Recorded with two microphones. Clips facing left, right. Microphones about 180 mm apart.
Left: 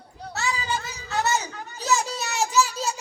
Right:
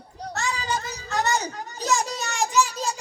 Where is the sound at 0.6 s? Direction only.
40° right (ahead or behind).